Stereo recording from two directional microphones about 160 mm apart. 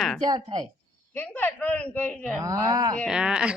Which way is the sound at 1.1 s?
10° left (ahead or behind).